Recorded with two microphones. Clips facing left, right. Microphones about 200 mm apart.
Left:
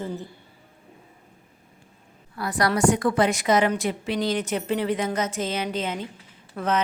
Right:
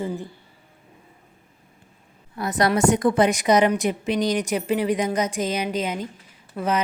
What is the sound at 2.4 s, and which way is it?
A woman's voice, 20° right (ahead or behind).